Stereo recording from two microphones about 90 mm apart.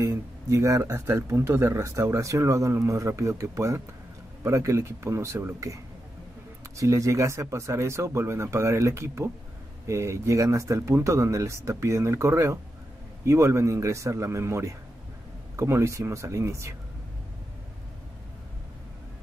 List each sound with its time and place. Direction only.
0.5 s speech: 35° right (ahead or behind)
6.8 s speech: 35° right (ahead or behind)